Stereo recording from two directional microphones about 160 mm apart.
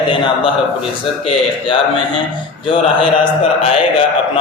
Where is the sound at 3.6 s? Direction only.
35° left (ahead or behind).